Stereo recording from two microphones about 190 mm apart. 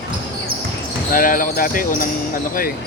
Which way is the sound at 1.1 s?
45° left (ahead or behind).